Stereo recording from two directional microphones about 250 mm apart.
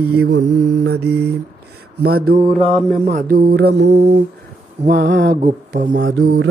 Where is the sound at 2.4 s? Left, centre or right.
Right.